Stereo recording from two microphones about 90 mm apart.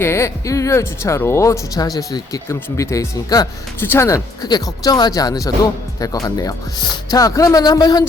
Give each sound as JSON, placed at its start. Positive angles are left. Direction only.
{"t": 0.0, "sound": "speech", "side_deg": 30}
{"t": 3.8, "sound": "speech", "side_deg": 25}
{"t": 4.4, "sound": "speech", "side_deg": 50}